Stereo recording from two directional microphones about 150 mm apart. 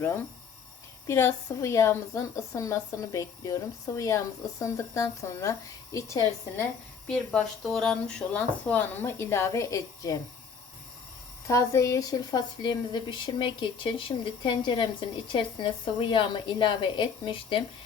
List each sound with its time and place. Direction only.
1.0 s a woman's voice: 20° left (ahead or behind)
7.1 s speech: 5° left (ahead or behind); by 10.2 s 20° left (ahead or behind)
11.4 s a woman's voice: 20° left (ahead or behind); by 17.6 s 35° left (ahead or behind)